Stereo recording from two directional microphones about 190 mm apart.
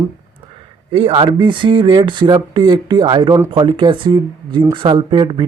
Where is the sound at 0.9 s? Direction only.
30° right (ahead or behind).